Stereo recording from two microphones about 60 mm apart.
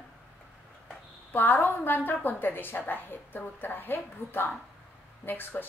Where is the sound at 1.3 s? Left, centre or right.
Left.